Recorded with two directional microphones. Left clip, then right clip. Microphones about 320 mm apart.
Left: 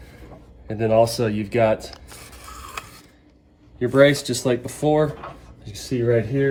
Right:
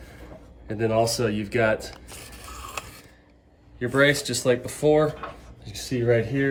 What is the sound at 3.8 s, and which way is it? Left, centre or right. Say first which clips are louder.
Speech: left 5 dB; centre.